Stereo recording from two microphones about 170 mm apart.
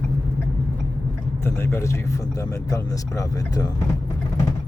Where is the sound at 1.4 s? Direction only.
15° left (ahead or behind).